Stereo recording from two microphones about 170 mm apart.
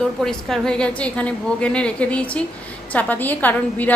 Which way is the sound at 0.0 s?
5° left (ahead or behind).